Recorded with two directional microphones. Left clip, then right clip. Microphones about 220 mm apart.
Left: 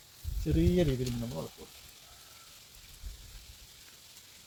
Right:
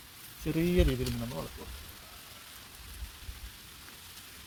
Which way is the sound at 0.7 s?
20° right (ahead or behind).